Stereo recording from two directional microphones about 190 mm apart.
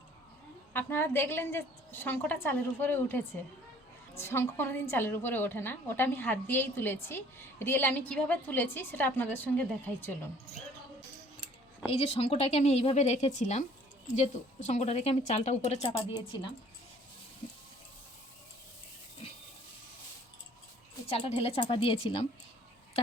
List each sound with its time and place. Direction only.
0.7 s a woman's voice: 10° left (ahead or behind)
11.9 s a woman's voice: 30° left (ahead or behind)
15.8 s a woman's voice: 20° left (ahead or behind)
21.1 s a woman's voice: 30° left (ahead or behind)